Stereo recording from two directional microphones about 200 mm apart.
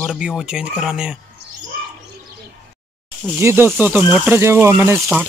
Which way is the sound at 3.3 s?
10° right (ahead or behind).